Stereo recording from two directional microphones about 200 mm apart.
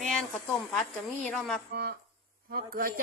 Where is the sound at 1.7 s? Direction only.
50° right (ahead or behind).